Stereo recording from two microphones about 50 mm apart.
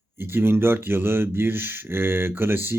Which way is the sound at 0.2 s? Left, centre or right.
Right.